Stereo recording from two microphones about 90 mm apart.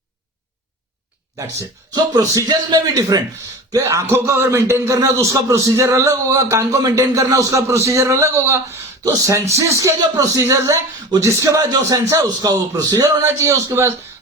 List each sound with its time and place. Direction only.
1.4 s a man's voice: 40° right (ahead or behind)
3.8 s a man's voice: 30° right (ahead or behind)